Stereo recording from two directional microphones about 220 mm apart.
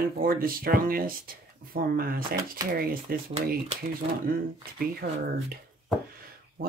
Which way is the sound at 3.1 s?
40° right (ahead or behind).